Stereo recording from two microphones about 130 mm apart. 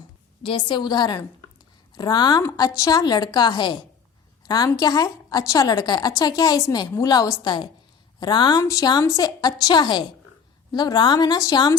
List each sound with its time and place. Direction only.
0.4 s a woman's voice: 40° left (ahead or behind)